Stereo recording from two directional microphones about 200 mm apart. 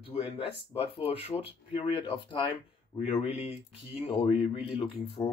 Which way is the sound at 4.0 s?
30° left (ahead or behind).